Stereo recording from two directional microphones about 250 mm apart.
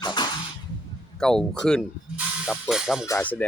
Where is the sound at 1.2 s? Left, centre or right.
Centre.